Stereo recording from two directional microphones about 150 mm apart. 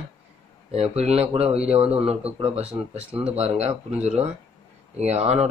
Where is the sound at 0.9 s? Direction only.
45° right (ahead or behind).